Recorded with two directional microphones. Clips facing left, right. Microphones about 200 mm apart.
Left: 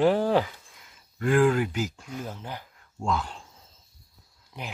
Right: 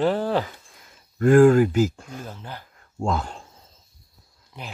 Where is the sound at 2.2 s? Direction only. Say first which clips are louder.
Left 1 dB; 15° left (ahead or behind).